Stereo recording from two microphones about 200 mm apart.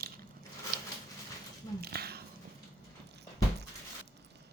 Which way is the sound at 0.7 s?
45° right (ahead or behind).